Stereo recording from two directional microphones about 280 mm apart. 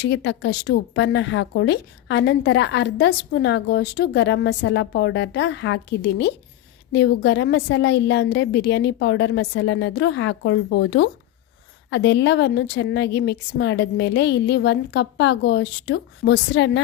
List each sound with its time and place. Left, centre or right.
0.0 s speech: left